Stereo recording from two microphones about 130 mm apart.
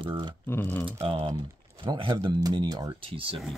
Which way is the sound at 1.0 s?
40° right (ahead or behind).